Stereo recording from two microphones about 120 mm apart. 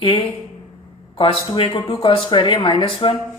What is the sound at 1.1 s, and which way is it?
Speech, 50° left (ahead or behind).